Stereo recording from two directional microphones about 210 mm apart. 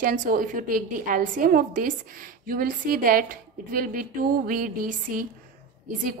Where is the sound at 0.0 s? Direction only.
40° right (ahead or behind).